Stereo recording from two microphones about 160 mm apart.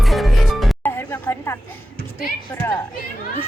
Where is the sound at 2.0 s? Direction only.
65° left (ahead or behind).